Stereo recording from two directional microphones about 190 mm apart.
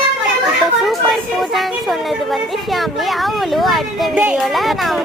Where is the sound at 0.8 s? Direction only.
Centre (ahead or behind).